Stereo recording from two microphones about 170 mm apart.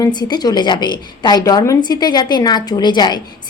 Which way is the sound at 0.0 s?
25° left (ahead or behind).